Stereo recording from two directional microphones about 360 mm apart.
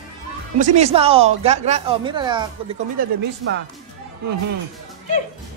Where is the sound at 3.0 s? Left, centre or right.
Right.